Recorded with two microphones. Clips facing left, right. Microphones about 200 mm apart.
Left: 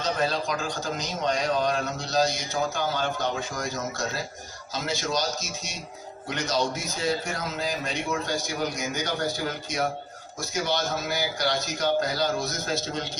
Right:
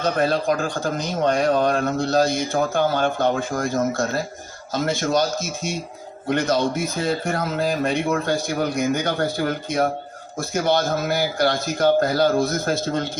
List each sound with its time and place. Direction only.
0.0 s a man's voice: 55° right (ahead or behind)